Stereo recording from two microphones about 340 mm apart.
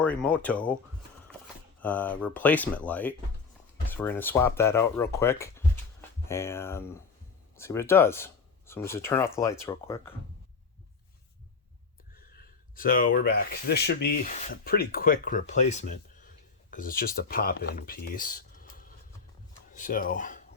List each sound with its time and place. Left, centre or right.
0.0 s speech: centre
1.8 s speech: centre
12.1 s speech: left